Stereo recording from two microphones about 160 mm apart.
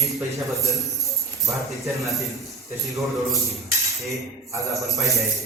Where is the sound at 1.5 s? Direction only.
20° right (ahead or behind).